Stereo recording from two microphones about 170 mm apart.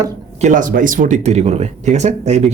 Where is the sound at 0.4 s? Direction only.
50° right (ahead or behind).